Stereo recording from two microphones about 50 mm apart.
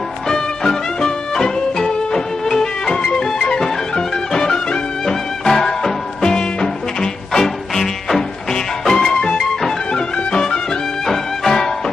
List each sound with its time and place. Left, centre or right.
0.3 s music: centre